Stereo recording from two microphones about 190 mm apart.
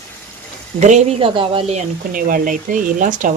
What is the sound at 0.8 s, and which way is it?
Speech, 35° right (ahead or behind).